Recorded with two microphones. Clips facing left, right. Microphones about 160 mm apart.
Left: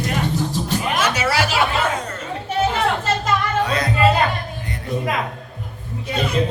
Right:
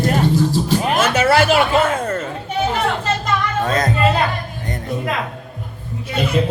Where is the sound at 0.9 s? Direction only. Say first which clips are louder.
Right 6 dB; 55° right (ahead or behind).